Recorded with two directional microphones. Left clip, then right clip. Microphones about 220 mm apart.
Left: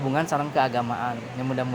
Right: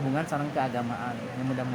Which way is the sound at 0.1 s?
45° left (ahead or behind).